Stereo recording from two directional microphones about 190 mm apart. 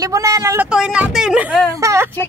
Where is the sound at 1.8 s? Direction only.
15° right (ahead or behind).